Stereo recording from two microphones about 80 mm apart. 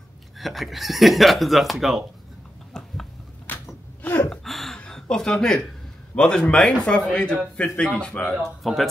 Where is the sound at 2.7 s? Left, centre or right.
Centre.